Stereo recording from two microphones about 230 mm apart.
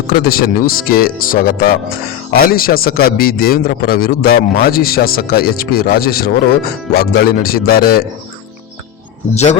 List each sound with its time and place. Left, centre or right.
0.1 s a man's voice: left
9.3 s speech: left